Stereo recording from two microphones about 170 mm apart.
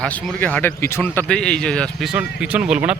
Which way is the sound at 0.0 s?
5° left (ahead or behind).